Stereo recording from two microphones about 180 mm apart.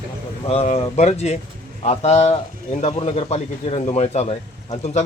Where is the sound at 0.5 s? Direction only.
35° left (ahead or behind).